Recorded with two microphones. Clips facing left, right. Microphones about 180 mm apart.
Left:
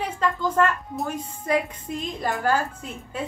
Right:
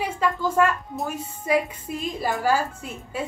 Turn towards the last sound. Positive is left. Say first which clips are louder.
# right 1 dB
turn(degrees=-10)  # may be behind; listen again after turning